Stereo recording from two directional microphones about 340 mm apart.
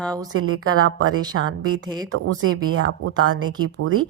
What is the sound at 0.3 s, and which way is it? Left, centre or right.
Speech, right.